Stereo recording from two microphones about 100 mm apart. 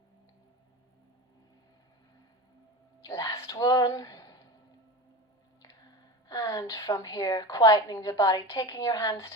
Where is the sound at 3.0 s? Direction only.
40° left (ahead or behind).